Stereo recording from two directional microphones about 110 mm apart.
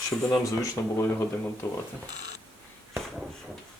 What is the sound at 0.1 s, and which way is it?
Speech, 30° left (ahead or behind).